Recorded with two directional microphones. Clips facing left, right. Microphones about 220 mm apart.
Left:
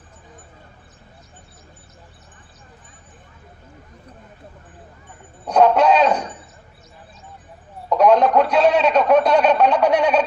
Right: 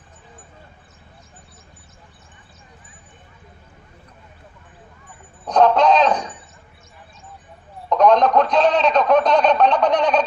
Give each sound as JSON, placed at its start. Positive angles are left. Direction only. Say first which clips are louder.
{"t": 5.5, "sound": "a man's voice", "louder": "even", "side_deg": 10}
{"t": 7.9, "sound": "a man's voice", "louder": "even", "side_deg": 10}